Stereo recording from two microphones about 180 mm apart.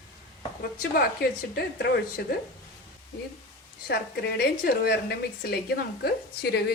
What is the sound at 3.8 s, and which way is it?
A woman's voice, 60° left (ahead or behind).